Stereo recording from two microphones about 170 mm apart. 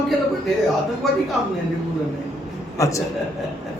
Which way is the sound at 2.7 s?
20° left (ahead or behind).